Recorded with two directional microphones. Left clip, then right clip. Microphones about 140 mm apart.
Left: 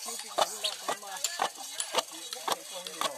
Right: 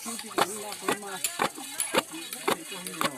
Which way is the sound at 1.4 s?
5° left (ahead or behind).